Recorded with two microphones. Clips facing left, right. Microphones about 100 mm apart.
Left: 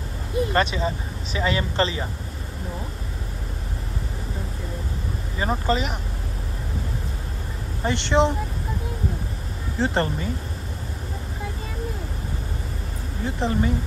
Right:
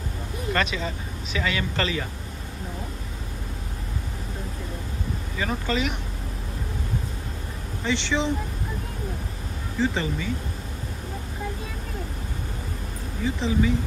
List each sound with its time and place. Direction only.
0.5 s speech: 35° left (ahead or behind)
5.4 s speech: 35° left (ahead or behind)
7.8 s speech: 55° left (ahead or behind)
9.8 s speech: 60° left (ahead or behind)
13.4 s speech: 55° left (ahead or behind)